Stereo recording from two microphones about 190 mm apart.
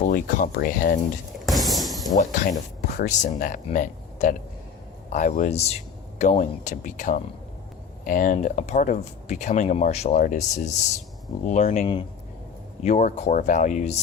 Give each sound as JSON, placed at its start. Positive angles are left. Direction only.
{"t": 0.1, "sound": "speech", "side_deg": 45}
{"t": 1.5, "sound": "a sound", "side_deg": 0}
{"t": 2.1, "sound": "speech", "side_deg": 40}